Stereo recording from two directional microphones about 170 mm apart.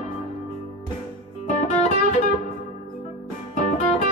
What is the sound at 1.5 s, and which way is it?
Music, 45° left (ahead or behind).